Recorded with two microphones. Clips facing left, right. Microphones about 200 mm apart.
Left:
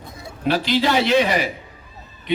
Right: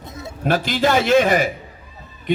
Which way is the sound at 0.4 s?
50° right (ahead or behind).